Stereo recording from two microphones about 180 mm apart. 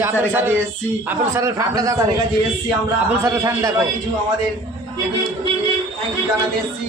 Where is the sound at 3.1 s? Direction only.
15° right (ahead or behind).